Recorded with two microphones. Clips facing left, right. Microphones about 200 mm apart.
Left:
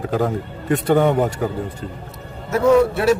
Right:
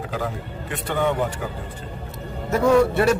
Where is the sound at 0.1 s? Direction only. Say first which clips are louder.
Left 10 dB; 45° left (ahead or behind).